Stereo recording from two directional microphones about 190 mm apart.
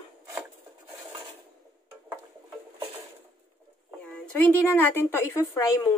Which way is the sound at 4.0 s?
5° left (ahead or behind).